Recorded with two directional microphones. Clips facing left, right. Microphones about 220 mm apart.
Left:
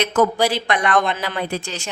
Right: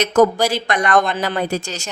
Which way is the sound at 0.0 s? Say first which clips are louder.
Right 3 dB; 40° right (ahead or behind).